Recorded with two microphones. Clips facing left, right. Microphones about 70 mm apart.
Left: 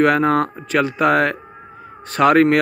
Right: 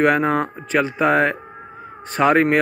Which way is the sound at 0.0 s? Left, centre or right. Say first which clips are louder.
Left 2 dB; centre.